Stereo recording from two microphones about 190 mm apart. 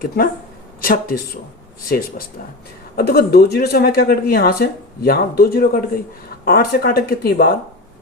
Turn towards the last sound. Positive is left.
turn(degrees=50)  # may be behind; listen again after turning